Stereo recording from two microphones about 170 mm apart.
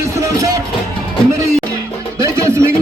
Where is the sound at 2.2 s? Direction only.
15° right (ahead or behind).